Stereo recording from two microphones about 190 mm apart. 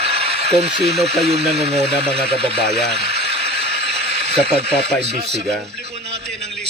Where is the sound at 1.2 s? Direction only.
35° right (ahead or behind).